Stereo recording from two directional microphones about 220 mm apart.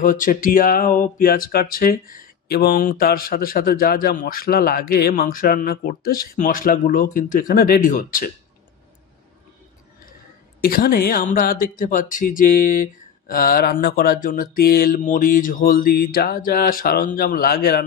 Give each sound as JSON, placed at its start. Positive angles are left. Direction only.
{"t": 0.0, "sound": "speech", "side_deg": 40}
{"t": 10.6, "sound": "speech", "side_deg": 40}